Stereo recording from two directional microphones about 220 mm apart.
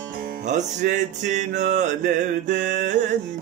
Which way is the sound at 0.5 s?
35° right (ahead or behind).